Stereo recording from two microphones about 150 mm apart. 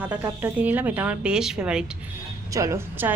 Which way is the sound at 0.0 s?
10° right (ahead or behind).